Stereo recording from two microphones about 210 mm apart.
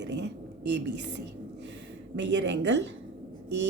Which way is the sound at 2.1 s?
55° right (ahead or behind).